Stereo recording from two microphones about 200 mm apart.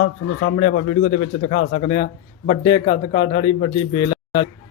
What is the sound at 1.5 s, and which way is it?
Speech, 90° left.